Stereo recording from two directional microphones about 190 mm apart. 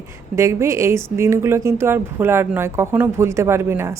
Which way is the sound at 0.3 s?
15° right (ahead or behind).